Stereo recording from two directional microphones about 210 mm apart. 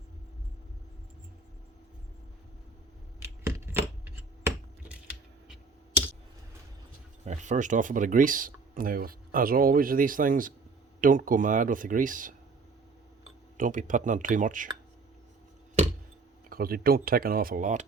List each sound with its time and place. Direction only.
3.2 s computer keyboard: 10° right (ahead or behind)
7.3 s speech: 35° right (ahead or behind)
13.6 s speech: 40° right (ahead or behind)
16.5 s speech: 45° right (ahead or behind)